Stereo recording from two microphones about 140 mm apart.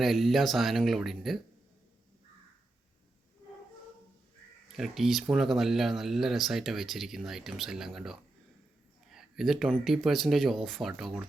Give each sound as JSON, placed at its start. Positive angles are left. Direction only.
{"t": 0.0, "sound": "speech", "side_deg": 0}
{"t": 4.8, "sound": "speech", "side_deg": 0}